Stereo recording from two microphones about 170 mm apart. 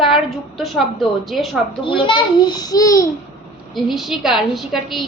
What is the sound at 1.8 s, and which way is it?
A child's voice, 30° left (ahead or behind).